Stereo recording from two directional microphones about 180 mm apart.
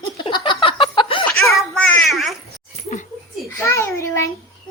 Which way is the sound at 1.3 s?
5° left (ahead or behind).